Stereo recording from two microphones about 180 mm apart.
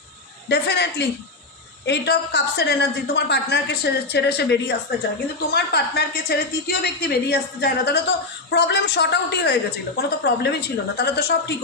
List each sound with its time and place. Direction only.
0.4 s a woman's voice: 65° left (ahead or behind)